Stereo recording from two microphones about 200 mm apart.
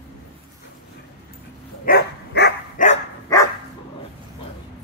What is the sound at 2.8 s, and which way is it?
Dog, 40° left (ahead or behind).